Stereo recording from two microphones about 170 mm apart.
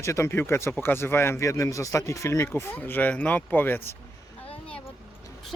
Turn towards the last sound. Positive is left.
turn(degrees=10)  # may be behind; listen again after turning